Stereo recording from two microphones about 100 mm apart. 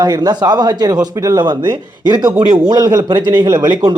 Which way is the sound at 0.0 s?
40° right (ahead or behind).